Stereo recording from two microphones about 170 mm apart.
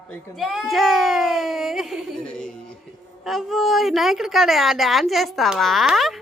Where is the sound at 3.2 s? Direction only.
Centre (ahead or behind).